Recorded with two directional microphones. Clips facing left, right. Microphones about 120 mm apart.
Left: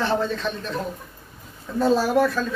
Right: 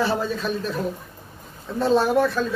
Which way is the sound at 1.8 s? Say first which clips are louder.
Even; centre (ahead or behind).